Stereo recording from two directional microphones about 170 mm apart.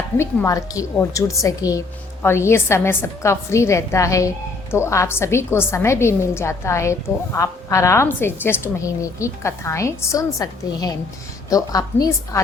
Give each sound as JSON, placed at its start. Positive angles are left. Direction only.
{"t": 0.2, "sound": "a woman's voice", "side_deg": 20}